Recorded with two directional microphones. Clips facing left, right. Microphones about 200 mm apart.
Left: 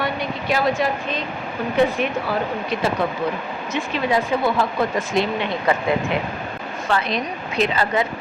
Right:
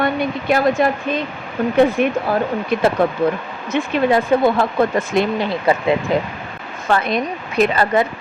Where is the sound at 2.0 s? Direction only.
50° right (ahead or behind).